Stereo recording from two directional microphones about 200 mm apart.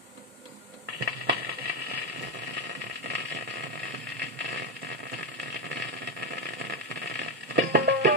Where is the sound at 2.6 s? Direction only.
55° right (ahead or behind).